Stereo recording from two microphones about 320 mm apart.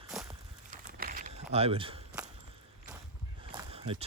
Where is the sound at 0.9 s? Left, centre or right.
Right.